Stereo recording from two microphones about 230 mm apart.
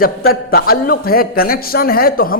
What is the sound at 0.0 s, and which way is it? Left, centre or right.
Speech, left.